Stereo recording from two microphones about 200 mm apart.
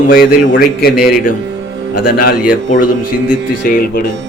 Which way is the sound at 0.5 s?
50° left (ahead or behind).